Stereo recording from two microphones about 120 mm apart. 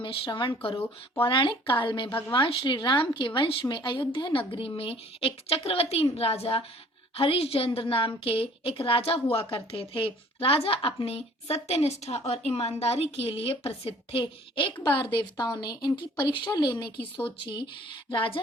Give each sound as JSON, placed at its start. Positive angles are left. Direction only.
{"t": 0.0, "sound": "a woman's voice", "side_deg": 45}
{"t": 18.1, "sound": "speech", "side_deg": 45}